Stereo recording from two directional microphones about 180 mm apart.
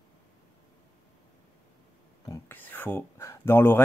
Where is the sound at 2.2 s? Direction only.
15° left (ahead or behind).